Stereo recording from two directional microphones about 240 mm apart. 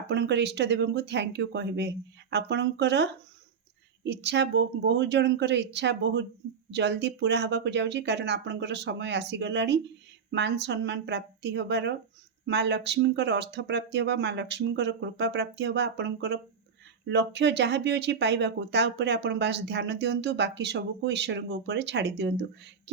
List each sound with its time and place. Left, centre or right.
0.1 s speech: right